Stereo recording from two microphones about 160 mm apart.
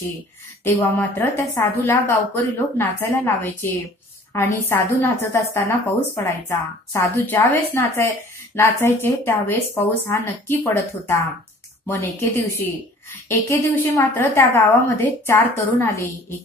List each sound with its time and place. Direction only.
0.7 s a woman's voice: 15° left (ahead or behind)